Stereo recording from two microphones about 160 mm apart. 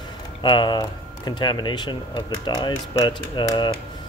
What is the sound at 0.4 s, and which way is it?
Speech, 25° left (ahead or behind).